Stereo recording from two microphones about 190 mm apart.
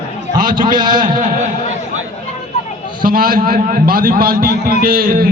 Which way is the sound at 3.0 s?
50° right (ahead or behind).